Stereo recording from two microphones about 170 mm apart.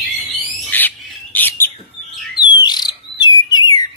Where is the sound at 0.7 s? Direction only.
10° left (ahead or behind).